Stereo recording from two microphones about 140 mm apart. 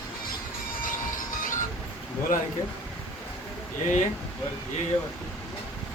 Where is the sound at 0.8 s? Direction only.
70° left (ahead or behind).